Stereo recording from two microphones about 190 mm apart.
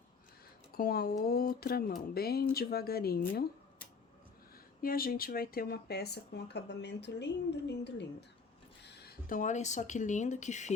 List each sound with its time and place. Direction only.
0.7 s speech: 50° left (ahead or behind)
4.8 s speech: 50° left (ahead or behind)